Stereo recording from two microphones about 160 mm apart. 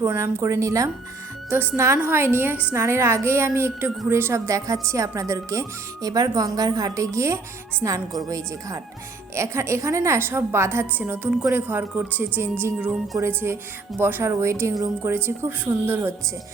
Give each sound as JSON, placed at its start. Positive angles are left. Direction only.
{"t": 0.0, "sound": "a woman's voice", "side_deg": -15}